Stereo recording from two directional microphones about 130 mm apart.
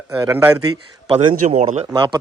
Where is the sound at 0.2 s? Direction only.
20° right (ahead or behind).